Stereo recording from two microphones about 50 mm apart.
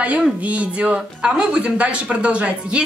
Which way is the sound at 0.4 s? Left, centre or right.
Right.